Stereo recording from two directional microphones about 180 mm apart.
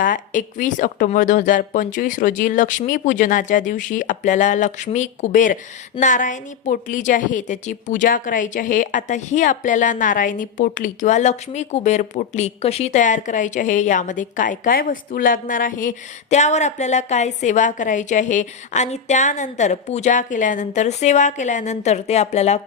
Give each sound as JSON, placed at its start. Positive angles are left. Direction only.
{"t": 0.0, "sound": "a woman's voice", "side_deg": 45}